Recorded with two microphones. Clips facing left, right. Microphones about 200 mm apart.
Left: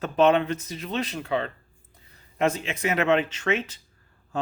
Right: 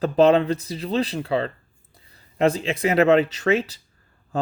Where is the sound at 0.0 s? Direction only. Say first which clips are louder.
Right 4 dB; 35° right (ahead or behind).